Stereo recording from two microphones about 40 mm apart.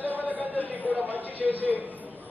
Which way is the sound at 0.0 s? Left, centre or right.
Left.